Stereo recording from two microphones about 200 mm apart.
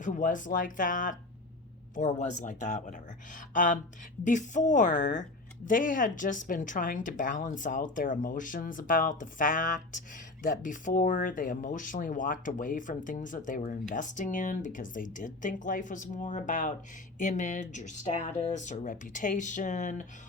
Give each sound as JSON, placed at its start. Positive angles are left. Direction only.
{"t": 0.0, "sound": "speech", "side_deg": 40}